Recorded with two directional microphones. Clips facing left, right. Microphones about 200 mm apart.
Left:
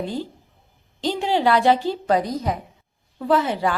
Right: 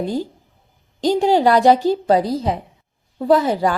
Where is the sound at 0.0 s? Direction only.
40° right (ahead or behind).